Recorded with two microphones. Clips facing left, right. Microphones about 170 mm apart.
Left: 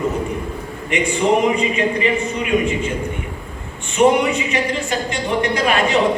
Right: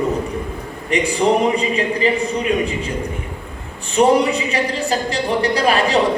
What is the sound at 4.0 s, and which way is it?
Speech, 35° right (ahead or behind).